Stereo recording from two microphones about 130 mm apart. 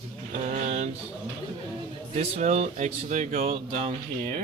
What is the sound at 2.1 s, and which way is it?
Speech, 70° right (ahead or behind).